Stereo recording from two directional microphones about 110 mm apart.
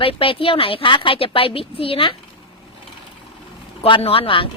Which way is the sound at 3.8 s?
60° left (ahead or behind).